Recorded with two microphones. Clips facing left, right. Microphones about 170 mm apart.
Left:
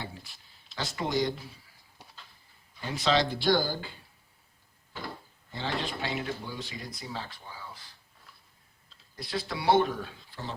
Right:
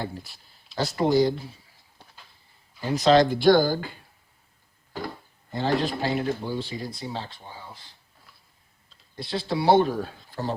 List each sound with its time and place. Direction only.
0.0 s a man's voice: 40° right (ahead or behind)
2.8 s speech: 40° right (ahead or behind)
5.0 s speech: 45° right (ahead or behind)
6.4 s speech: 30° right (ahead or behind)
9.1 s a man's voice: 25° right (ahead or behind)